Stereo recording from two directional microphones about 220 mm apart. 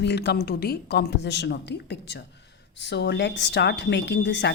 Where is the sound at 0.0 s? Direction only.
50° left (ahead or behind).